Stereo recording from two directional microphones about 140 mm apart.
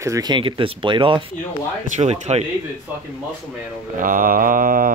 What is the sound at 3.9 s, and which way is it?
Mantra, 75° right (ahead or behind).